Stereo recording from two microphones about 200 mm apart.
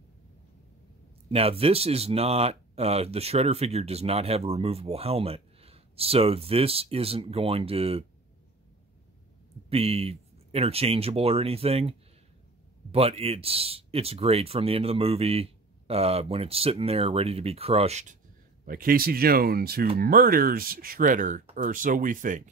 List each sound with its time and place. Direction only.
1.3 s speech: 30° right (ahead or behind)
9.7 s speech: 30° right (ahead or behind)
12.9 s speech: 30° right (ahead or behind)
18.7 s speech: 45° right (ahead or behind)